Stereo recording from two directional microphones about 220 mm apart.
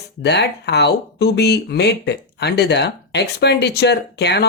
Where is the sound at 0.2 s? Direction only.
50° left (ahead or behind).